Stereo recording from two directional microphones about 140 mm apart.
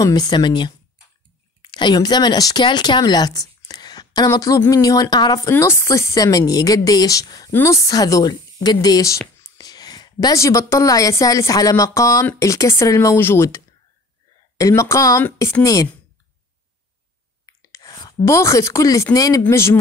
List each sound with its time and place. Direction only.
0.0 s a woman's voice: 30° left (ahead or behind)
5.5 s a woman's voice: 20° left (ahead or behind)
14.6 s a woman's voice: 20° left (ahead or behind)
17.5 s a sound: 25° left (ahead or behind)
18.2 s a woman's voice: 20° left (ahead or behind)